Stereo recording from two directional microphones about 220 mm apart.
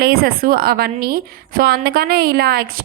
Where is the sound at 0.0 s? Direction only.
45° right (ahead or behind).